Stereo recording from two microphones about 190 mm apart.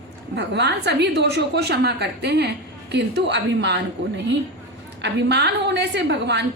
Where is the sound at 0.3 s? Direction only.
65° right (ahead or behind).